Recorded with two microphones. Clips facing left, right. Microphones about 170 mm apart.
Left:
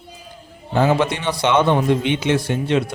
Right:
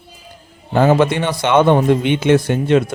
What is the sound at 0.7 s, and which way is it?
Speech, 50° right (ahead or behind).